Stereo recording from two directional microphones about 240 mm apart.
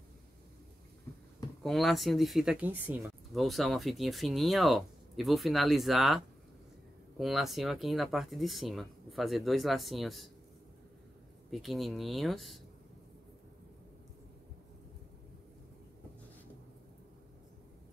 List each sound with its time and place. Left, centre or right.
1.6 s speech: centre
11.5 s speech: centre